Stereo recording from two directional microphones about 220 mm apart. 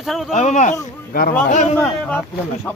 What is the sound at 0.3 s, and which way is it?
Speech, 35° left (ahead or behind).